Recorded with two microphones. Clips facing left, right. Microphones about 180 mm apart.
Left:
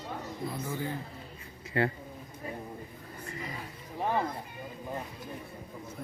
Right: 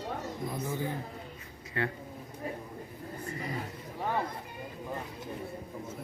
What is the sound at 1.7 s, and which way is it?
Speech, 30° left (ahead or behind).